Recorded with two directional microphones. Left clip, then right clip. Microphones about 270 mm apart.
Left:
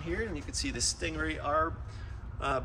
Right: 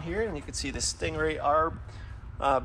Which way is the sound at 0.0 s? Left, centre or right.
Centre.